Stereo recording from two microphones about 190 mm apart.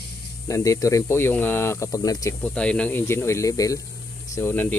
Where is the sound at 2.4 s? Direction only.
5° left (ahead or behind).